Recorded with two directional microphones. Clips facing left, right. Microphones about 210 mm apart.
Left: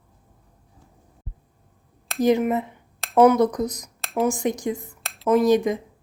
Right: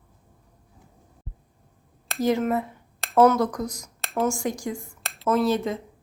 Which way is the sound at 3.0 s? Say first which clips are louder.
Left 1 dB; centre (ahead or behind).